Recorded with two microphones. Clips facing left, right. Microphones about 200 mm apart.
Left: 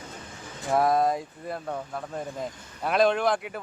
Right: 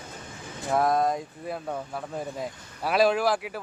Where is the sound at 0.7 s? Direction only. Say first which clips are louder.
Left 1 dB; centre (ahead or behind).